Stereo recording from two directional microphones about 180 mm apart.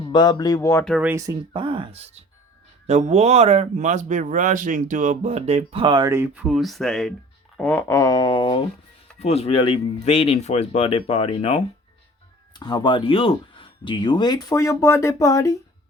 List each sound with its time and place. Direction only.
0.1 s speech: 25° left (ahead or behind)
0.9 s speech: 10° right (ahead or behind); by 15.5 s 15° left (ahead or behind)